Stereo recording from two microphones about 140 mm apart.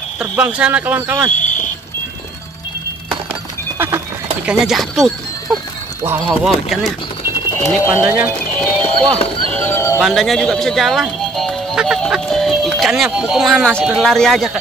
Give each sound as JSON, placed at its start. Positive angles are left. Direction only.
{"t": 0.2, "sound": "speech", "side_deg": -10}
{"t": 1.4, "sound": "vehicle", "side_deg": 65}
{"t": 3.7, "sound": "frog", "side_deg": -20}
{"t": 4.5, "sound": "speech", "side_deg": -5}
{"t": 8.0, "sound": "speech", "side_deg": -10}
{"t": 8.5, "sound": "speech", "side_deg": 10}
{"t": 9.5, "sound": "neigh", "side_deg": 15}
{"t": 9.9, "sound": "speech", "side_deg": 0}